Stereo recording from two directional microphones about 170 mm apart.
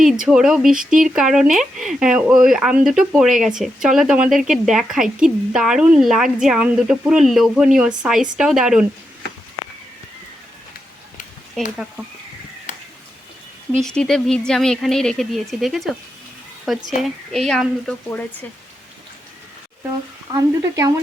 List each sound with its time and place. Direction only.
0.0 s a woman's voice: 5° right (ahead or behind)
13.8 s a woman's voice: 5° left (ahead or behind)
20.3 s speech: 20° right (ahead or behind)